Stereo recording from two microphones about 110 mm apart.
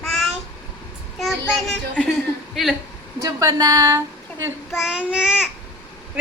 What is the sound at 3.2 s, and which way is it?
Speech, 30° right (ahead or behind).